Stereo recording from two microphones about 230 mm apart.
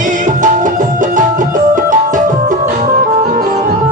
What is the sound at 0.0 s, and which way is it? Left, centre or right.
Music, right.